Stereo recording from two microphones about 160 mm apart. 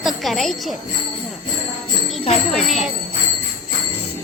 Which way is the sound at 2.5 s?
Centre (ahead or behind).